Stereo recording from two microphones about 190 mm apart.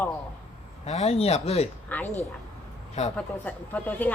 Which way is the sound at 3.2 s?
10° left (ahead or behind).